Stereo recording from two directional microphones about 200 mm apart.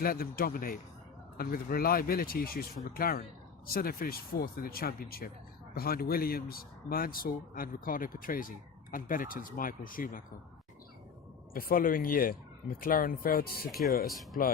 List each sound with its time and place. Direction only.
0.0 s speech: 45° left (ahead or behind)
11.5 s speech: 45° left (ahead or behind)